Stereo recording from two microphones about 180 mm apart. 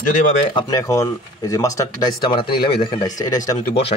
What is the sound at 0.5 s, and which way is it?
Speech, 20° left (ahead or behind).